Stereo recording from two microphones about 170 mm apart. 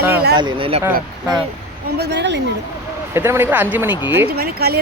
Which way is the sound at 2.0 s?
90° right.